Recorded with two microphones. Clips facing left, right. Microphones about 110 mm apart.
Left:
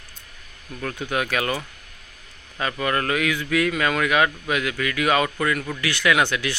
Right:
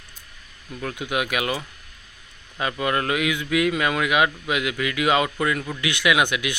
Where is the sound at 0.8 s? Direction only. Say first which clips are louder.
Even; 10° right (ahead or behind).